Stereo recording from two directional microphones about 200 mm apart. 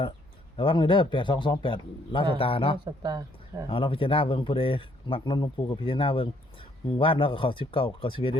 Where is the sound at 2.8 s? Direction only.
20° right (ahead or behind).